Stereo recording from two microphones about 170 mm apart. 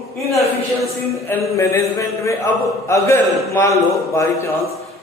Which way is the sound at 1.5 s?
15° left (ahead or behind).